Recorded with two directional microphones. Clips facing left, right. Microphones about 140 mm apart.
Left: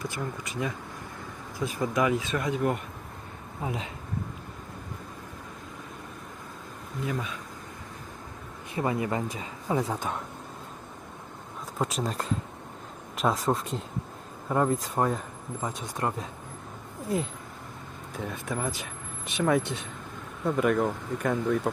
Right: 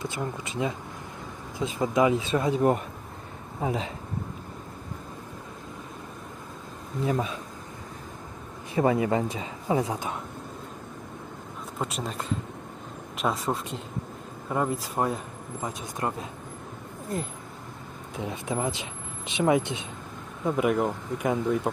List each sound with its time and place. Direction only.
0.0 s speech: 25° right (ahead or behind)
7.0 s speech: 30° right (ahead or behind)
8.7 s speech: 25° right (ahead or behind)
9.6 s speech: 15° right (ahead or behind)
11.8 s speech: centre (ahead or behind)
15.6 s speech: 15° right (ahead or behind)
18.2 s speech: 20° right (ahead or behind)